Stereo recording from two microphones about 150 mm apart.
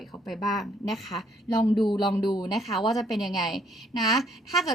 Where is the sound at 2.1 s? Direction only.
25° left (ahead or behind).